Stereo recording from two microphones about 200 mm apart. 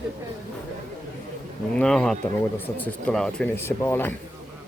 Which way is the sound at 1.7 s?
5° left (ahead or behind).